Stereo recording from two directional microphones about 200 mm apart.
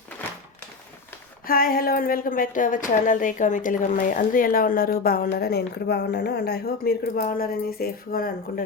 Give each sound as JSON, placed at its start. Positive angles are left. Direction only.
{"t": 1.5, "sound": "speech", "side_deg": 45}